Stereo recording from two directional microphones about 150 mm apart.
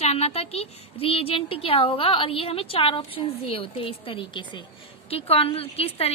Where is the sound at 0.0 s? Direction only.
45° left (ahead or behind).